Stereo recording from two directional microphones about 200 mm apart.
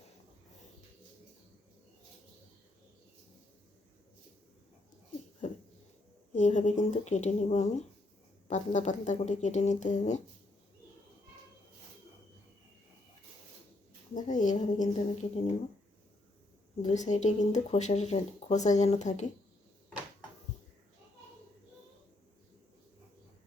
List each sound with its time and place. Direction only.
6.3 s speech: 35° left (ahead or behind)
14.1 s a sound: 40° left (ahead or behind)
16.8 s speech: 35° left (ahead or behind)